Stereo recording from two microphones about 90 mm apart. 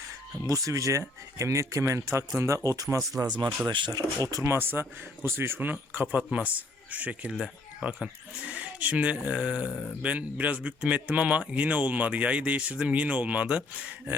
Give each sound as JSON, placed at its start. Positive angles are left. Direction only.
{"t": 0.4, "sound": "speech", "side_deg": -40}
{"t": 3.7, "sound": "speech", "side_deg": -60}
{"t": 4.2, "sound": "speech", "side_deg": -40}
{"t": 4.5, "sound": "a man's voice", "side_deg": -25}
{"t": 7.3, "sound": "speech", "side_deg": -5}